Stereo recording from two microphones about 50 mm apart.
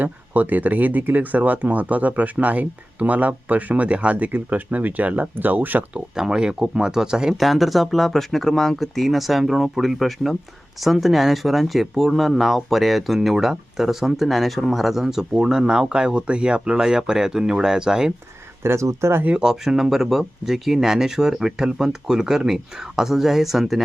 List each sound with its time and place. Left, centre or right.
0.0 s speech: right
6.1 s speech: centre
7.3 s speech: centre
18.6 s speech: right
19.4 s speech: centre